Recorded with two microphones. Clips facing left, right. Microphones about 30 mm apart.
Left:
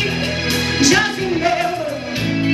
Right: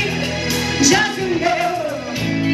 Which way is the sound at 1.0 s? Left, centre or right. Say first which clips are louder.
Left 1 dB; centre.